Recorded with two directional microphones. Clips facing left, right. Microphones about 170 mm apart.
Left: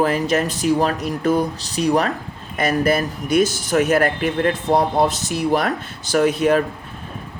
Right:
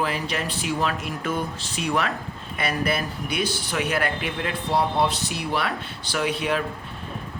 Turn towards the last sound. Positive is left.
turn(degrees=45)  # may be behind; listen again after turning